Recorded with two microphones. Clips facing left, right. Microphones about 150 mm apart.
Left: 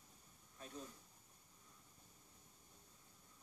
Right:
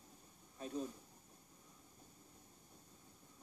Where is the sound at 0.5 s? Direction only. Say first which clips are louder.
Right 10 dB; 25° right (ahead or behind).